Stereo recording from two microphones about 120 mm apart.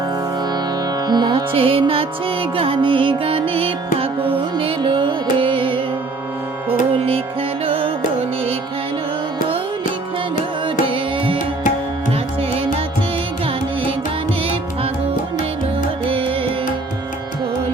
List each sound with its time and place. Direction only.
1.0 s music: 35° right (ahead or behind)